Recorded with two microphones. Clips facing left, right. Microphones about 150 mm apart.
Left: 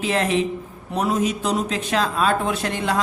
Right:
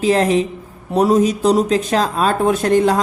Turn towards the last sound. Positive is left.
turn(degrees=-40)  # may be behind; listen again after turning